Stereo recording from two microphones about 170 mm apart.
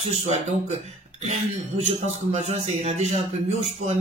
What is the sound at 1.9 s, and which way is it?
Music, 40° right (ahead or behind).